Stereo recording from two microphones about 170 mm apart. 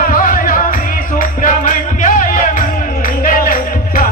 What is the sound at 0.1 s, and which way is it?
Music, 55° left (ahead or behind).